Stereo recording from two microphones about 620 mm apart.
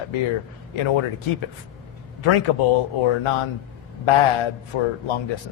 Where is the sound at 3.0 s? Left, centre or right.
Left.